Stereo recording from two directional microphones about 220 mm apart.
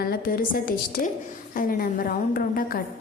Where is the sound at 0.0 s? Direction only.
40° left (ahead or behind).